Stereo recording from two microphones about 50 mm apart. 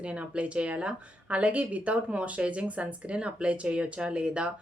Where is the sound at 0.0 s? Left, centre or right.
Right.